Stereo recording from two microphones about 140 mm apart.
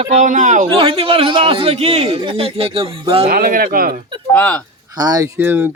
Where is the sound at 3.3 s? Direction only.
90° right.